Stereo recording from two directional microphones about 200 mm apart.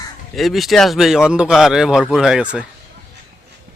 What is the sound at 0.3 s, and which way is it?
Speech, centre (ahead or behind).